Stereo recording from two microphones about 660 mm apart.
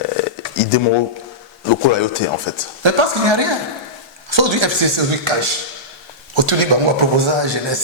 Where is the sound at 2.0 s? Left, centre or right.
Left.